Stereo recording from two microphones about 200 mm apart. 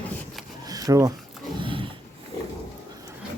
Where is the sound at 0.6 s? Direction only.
20° right (ahead or behind).